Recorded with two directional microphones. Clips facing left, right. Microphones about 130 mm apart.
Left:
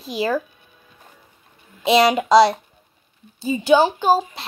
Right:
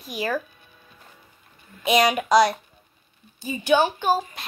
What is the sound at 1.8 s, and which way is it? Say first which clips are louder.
A child's voice: left 4 dB; 30° left (ahead or behind).